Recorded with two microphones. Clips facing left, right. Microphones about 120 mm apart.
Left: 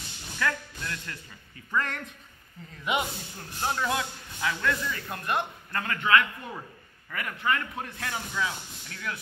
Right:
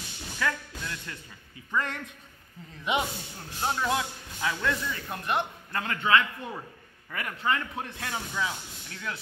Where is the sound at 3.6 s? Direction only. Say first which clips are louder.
Right 1 dB; 20° right (ahead or behind).